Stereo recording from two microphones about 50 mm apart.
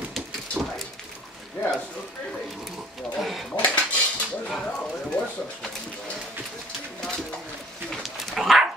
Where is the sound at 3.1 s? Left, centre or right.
Centre.